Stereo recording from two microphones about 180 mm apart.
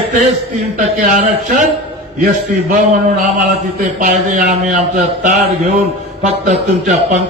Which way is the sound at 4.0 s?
50° right (ahead or behind).